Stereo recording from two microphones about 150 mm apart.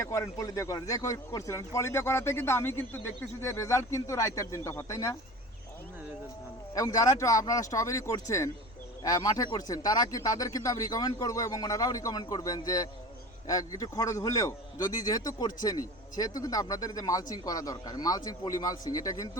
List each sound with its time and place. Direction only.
0.0 s a man's voice: 20° left (ahead or behind)
6.7 s a man's voice: 25° left (ahead or behind)